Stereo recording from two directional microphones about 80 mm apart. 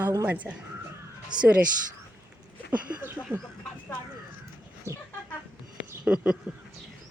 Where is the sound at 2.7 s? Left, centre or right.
Right.